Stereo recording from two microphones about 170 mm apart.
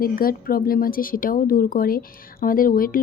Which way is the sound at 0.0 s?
60° left (ahead or behind).